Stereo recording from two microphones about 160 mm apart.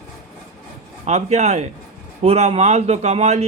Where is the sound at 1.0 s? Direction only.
45° right (ahead or behind).